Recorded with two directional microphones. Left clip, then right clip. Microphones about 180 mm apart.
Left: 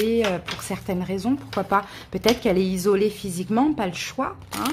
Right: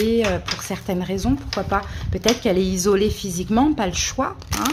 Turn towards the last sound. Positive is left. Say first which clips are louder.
# right 4 dB
turn(degrees=0)  # may be behind; listen again after turning